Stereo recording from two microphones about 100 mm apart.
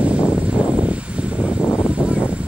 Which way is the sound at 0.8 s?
10° right (ahead or behind).